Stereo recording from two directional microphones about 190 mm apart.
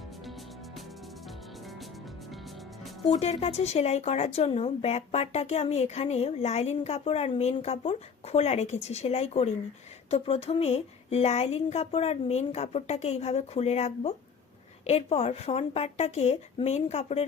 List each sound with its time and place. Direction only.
0.3 s music: centre (ahead or behind)
3.2 s speech: 35° left (ahead or behind)